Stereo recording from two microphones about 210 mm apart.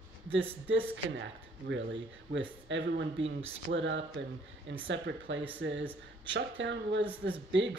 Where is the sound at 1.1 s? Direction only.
60° right (ahead or behind).